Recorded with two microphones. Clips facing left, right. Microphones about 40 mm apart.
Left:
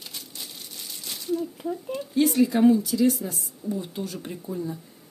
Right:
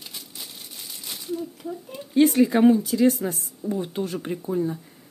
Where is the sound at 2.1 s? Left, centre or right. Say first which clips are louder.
Right 3 dB; right.